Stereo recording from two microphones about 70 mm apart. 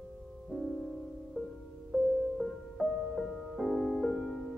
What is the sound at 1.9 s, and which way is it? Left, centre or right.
Music, centre.